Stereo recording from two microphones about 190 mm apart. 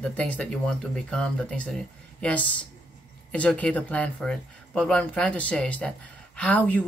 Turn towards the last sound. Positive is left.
turn(degrees=10)  # may be behind; listen again after turning